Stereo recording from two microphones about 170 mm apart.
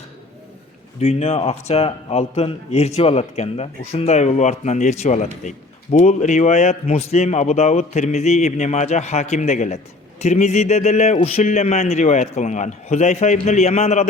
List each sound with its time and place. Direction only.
0.9 s a man's voice: 35° left (ahead or behind)